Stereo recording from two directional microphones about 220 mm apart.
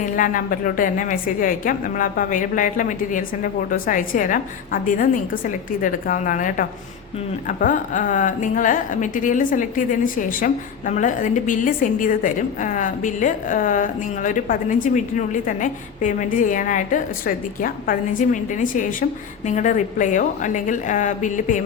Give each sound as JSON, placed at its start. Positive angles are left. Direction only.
{"t": 0.0, "sound": "a woman's voice", "side_deg": 35}